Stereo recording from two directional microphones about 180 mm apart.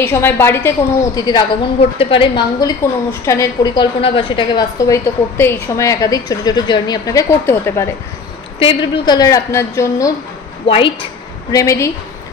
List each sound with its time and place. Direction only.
0.0 s a woman's voice: 10° left (ahead or behind)
1.8 s a woman's voice: 30° left (ahead or behind)
4.7 s a woman's voice: 15° left (ahead or behind)
8.5 s a woman's voice: 30° left (ahead or behind)
10.7 s a woman's voice: 30° left (ahead or behind)
11.5 s a woman's voice: 15° left (ahead or behind)